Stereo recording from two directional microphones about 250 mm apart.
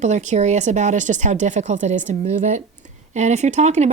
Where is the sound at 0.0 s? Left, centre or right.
Right.